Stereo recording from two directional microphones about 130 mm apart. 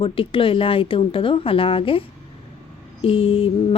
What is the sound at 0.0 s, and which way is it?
A woman's voice, 45° left (ahead or behind).